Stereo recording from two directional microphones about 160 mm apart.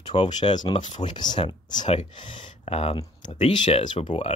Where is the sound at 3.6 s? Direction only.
50° left (ahead or behind).